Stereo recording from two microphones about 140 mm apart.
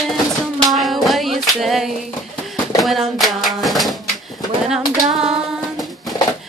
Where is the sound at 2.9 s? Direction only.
Centre (ahead or behind).